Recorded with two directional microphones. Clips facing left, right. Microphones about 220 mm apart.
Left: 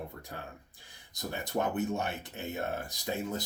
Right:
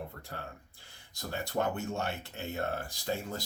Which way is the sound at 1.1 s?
20° left (ahead or behind).